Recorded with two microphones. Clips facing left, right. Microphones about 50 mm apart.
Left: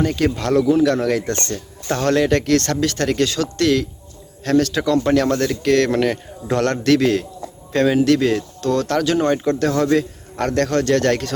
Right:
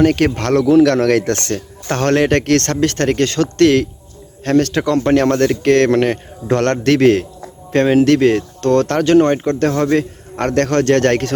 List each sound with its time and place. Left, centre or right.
0.0 s speech: right
1.9 s speech: right